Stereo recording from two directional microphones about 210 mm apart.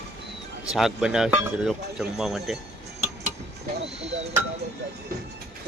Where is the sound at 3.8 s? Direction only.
30° right (ahead or behind).